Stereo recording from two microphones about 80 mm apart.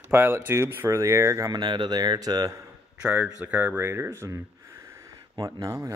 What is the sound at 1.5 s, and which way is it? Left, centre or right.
Speech, right.